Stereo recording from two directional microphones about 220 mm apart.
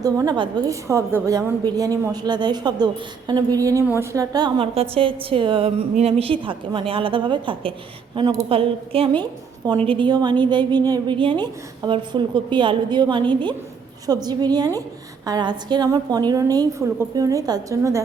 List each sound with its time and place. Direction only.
0.0 s a woman's voice: 15° right (ahead or behind)